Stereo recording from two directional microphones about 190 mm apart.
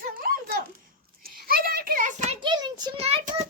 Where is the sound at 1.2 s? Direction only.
50° right (ahead or behind).